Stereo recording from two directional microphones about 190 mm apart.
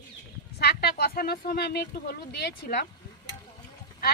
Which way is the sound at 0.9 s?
50° left (ahead or behind).